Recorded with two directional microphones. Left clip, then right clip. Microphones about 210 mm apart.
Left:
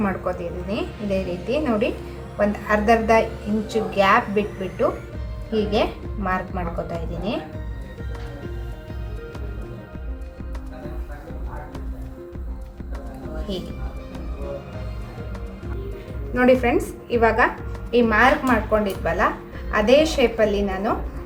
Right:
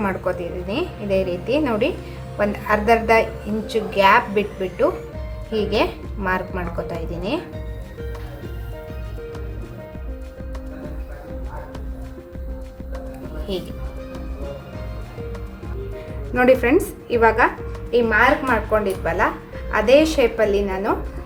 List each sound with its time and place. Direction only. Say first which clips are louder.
0.0 s a woman's voice: right 2 dB; 20° right (ahead or behind)
16.3 s a woman's voice: right 2 dB; 20° right (ahead or behind)